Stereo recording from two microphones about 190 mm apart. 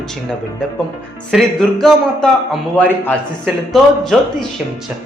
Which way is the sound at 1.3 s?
Centre (ahead or behind).